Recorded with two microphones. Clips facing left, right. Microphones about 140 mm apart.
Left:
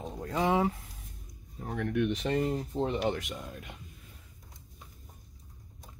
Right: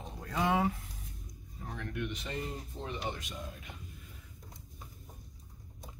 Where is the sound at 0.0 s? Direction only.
35° left (ahead or behind).